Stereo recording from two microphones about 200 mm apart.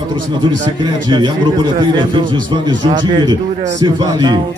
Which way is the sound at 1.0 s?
20° right (ahead or behind).